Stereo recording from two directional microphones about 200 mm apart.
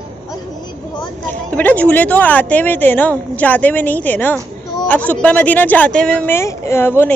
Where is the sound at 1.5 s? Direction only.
10° left (ahead or behind).